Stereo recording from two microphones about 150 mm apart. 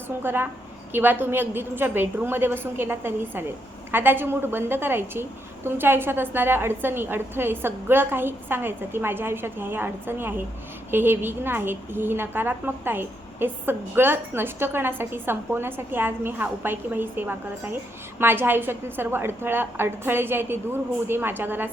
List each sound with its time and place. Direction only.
0.2 s a woman's voice: 15° right (ahead or behind)